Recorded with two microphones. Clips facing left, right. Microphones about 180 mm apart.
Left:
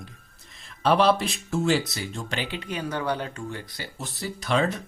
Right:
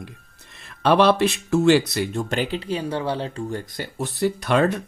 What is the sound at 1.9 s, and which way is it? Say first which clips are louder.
Speech: right 8 dB; 60° right (ahead or behind).